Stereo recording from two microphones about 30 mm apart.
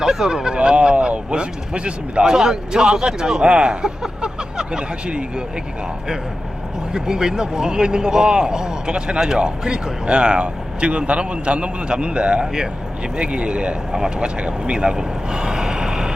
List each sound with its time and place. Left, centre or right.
0.0 s speech: centre
0.5 s speech: right
2.2 s speech: right
4.2 s a sound: right
6.9 s speech: right